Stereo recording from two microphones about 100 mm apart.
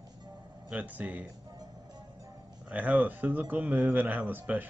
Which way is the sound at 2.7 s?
15° right (ahead or behind).